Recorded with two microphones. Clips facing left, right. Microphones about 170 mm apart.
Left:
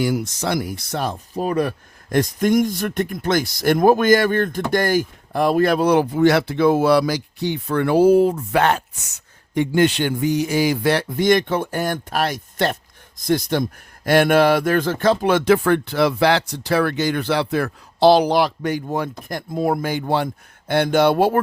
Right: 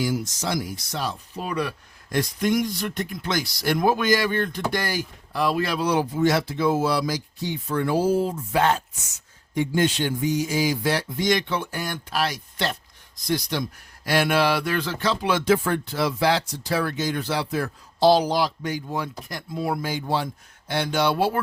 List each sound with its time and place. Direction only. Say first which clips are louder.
0.0 s speech: left 4 dB; 60° left (ahead or behind)